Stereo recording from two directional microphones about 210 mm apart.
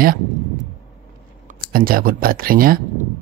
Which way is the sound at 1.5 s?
45° right (ahead or behind).